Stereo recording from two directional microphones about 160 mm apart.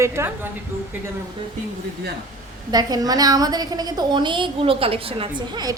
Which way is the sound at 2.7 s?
25° right (ahead or behind).